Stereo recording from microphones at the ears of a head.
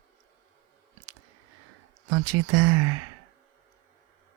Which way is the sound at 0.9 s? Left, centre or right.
Right.